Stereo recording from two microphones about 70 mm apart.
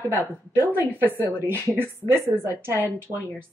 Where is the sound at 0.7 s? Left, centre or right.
Right.